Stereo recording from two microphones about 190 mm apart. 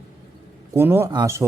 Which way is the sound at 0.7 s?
10° right (ahead or behind).